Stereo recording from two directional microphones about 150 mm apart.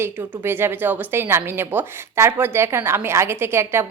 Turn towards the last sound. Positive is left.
turn(degrees=-15)  # may be behind; listen again after turning